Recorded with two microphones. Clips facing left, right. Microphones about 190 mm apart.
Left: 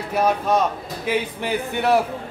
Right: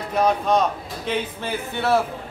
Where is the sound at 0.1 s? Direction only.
10° left (ahead or behind).